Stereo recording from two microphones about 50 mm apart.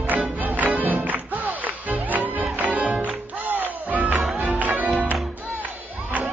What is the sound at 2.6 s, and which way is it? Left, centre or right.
Music, right.